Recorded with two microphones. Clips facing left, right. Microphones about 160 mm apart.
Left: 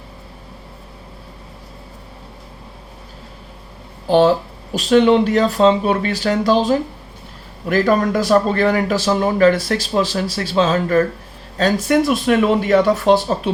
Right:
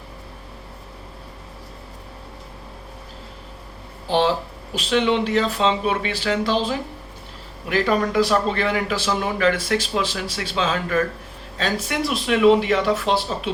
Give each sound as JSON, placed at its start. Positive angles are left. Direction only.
{"t": 4.7, "sound": "speech", "side_deg": 45}